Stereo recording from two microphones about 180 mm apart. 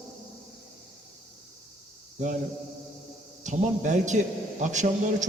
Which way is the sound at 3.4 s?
40° right (ahead or behind).